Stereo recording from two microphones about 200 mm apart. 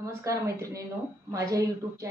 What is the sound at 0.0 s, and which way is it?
Speech, 15° right (ahead or behind).